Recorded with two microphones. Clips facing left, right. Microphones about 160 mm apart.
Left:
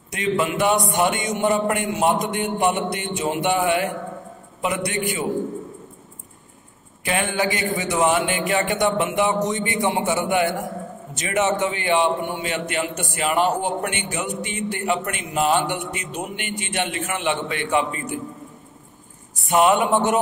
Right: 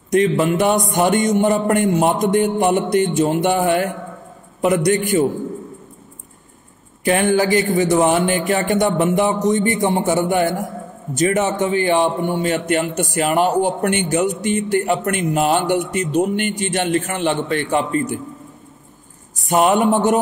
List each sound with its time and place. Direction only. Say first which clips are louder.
0.4 s a man's voice: right 4 dB; 40° right (ahead or behind)
0.7 s music: right 3 dB; centre (ahead or behind)
1.1 s a man's voice: right 6 dB; 40° right (ahead or behind)
7.1 s a man's voice: right 7 dB; 40° right (ahead or behind)
19.4 s a man's voice: right 3 dB; 40° right (ahead or behind)